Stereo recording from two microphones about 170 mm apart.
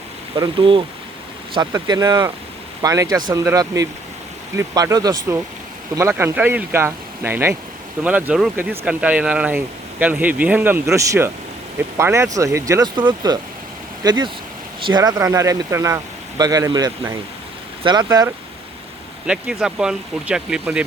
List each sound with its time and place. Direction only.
0.3 s speech: 30° right (ahead or behind)
19.3 s speech: 5° right (ahead or behind)